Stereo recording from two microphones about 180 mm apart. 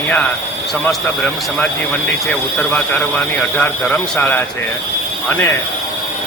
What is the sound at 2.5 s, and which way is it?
A man's voice, 5° left (ahead or behind).